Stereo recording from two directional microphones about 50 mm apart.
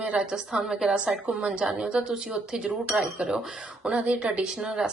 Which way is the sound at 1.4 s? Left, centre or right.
Centre.